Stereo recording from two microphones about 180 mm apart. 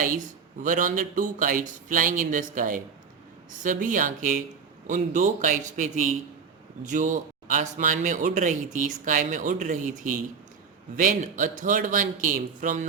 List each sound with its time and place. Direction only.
0.6 s a man's voice: 50° right (ahead or behind)